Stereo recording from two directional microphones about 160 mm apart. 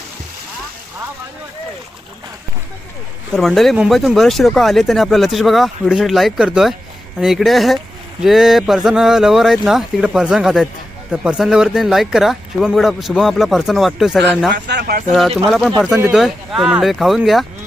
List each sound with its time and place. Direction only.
3.3 s speech: centre (ahead or behind)
14.5 s speech: 90° right
15.4 s speech: centre (ahead or behind)